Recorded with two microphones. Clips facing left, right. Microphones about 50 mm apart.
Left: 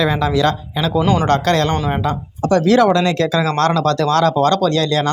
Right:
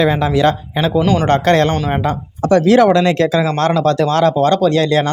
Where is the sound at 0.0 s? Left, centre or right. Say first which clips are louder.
Right 3 dB; right.